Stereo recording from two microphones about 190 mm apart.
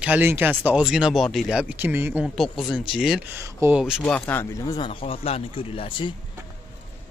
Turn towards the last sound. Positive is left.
turn(degrees=30)  # may be behind; listen again after turning